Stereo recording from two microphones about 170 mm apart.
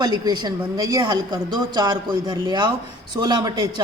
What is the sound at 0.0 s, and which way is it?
Speech, 25° right (ahead or behind).